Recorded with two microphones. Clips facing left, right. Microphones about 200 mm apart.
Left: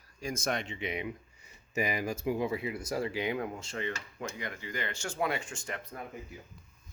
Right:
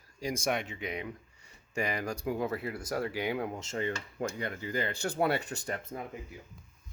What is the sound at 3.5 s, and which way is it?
Speech, 25° right (ahead or behind).